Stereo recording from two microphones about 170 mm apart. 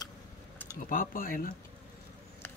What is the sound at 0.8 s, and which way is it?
Speech, 55° left (ahead or behind).